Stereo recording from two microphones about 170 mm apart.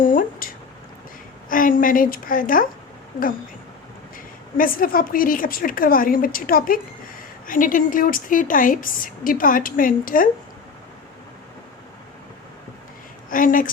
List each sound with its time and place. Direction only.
0.0 s a sound: 55° left (ahead or behind)
1.5 s a woman's voice: 55° left (ahead or behind)
4.5 s a woman's voice: 55° left (ahead or behind)
13.3 s a woman's voice: 55° left (ahead or behind)